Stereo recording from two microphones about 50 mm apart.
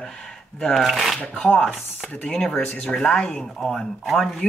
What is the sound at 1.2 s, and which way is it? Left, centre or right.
Speech, left.